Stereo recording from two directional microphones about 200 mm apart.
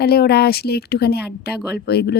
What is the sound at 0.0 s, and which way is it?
A woman's voice, 50° left (ahead or behind).